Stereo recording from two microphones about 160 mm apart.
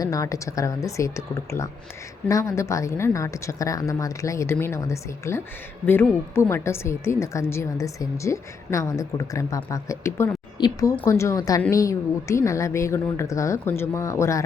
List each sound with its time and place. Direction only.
0.0 s a woman's voice: 20° left (ahead or behind)